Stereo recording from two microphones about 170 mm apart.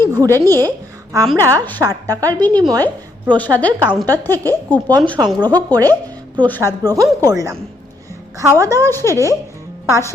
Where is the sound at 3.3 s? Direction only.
10° left (ahead or behind).